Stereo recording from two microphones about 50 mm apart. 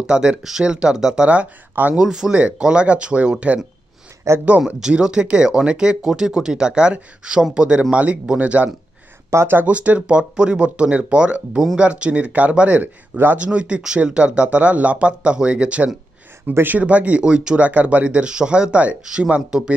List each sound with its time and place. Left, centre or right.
0.0 s speech: centre
1.2 s speech: right
2.0 s speech: centre
2.3 s speech: right
4.7 s speech: centre
9.3 s speech: right
9.7 s speech: right
16.5 s speech: right
16.8 s speech: right
17.6 s speech: right